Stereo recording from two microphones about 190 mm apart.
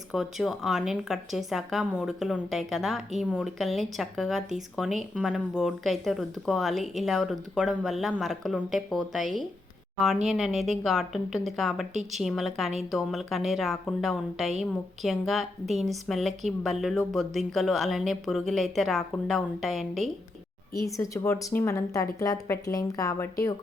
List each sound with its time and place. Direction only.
0.1 s speech: centre (ahead or behind)
20.7 s a woman's voice: 15° left (ahead or behind)